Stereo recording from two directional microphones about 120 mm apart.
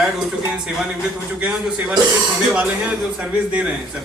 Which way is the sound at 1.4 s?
10° right (ahead or behind).